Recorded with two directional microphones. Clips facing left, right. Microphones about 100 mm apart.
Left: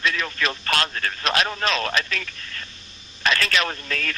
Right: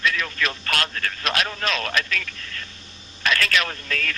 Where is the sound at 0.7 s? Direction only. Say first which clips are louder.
Left 5 dB; 5° left (ahead or behind).